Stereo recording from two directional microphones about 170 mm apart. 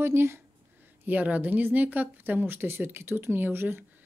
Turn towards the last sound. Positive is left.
turn(degrees=-10)  # may be behind; listen again after turning